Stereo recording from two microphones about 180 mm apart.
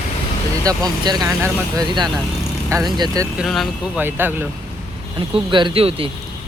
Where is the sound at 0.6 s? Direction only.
20° right (ahead or behind).